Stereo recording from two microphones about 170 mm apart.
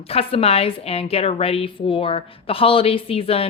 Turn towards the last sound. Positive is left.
turn(degrees=35)  # may be behind; listen again after turning